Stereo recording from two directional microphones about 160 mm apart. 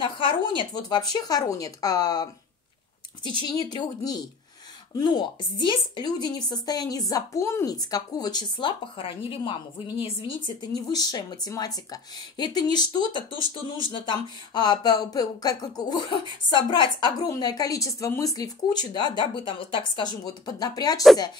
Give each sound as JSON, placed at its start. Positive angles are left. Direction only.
{"t": 0.0, "sound": "speech", "side_deg": 30}
{"t": 3.4, "sound": "speech", "side_deg": 25}